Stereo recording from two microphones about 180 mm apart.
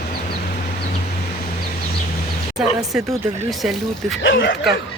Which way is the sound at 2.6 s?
Centre (ahead or behind).